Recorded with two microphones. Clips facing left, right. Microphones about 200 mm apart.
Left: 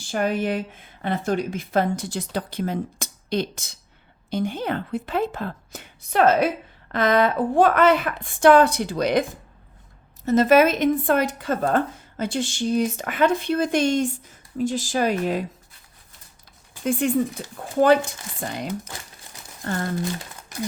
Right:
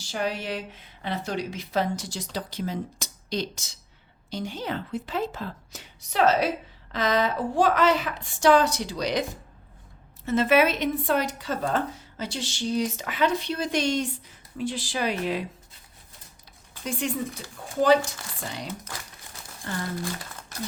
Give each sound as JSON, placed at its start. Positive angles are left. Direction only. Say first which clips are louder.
{"t": 0.0, "sound": "a woman's voice", "louder": "left 6 dB", "side_deg": 50}
{"t": 10.2, "sound": "speech", "louder": "left 5 dB", "side_deg": 40}
{"t": 17.0, "sound": "a woman's voice", "louder": "left 6 dB", "side_deg": 55}